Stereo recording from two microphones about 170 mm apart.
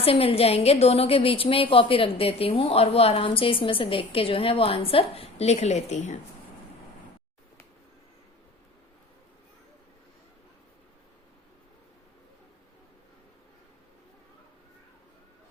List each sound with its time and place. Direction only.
0.0 s a woman's voice: 35° left (ahead or behind)